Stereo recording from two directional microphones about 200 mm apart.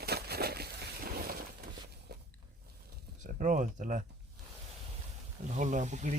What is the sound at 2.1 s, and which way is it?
Biting, 50° right (ahead or behind).